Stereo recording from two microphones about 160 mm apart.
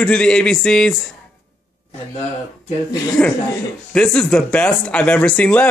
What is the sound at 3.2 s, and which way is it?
Speech, 10° left (ahead or behind).